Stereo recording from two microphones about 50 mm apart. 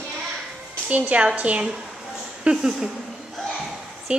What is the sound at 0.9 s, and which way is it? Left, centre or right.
Speech, right.